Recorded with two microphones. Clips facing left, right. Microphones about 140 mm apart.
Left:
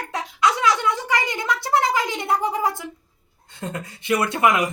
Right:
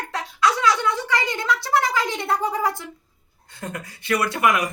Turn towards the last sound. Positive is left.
turn(degrees=25)  # may be behind; listen again after turning